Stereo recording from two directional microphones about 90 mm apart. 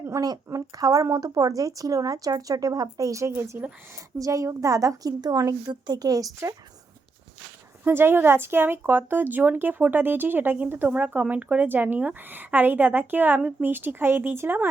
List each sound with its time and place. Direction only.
0.0 s a woman's voice: 35° right (ahead or behind)
7.9 s speech: 25° right (ahead or behind)